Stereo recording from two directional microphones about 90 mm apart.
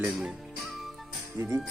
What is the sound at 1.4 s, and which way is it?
Speech, 25° right (ahead or behind).